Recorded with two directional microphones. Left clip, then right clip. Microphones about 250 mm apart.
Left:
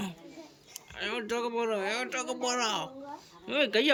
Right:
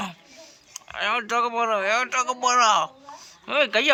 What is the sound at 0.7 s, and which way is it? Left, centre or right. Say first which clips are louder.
Speech: right 11 dB; centre.